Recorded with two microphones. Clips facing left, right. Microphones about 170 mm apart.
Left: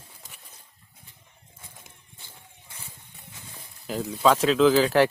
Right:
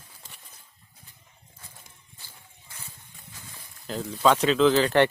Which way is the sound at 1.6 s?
25° left (ahead or behind).